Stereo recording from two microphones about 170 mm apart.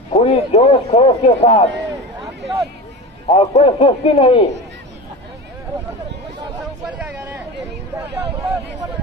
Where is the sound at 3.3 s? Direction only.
35° left (ahead or behind).